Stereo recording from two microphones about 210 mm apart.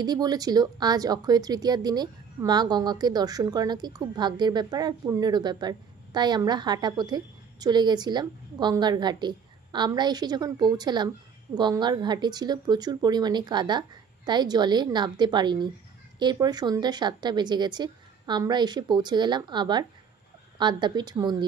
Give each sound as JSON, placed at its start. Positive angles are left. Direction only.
{"t": 0.0, "sound": "speech", "side_deg": -20}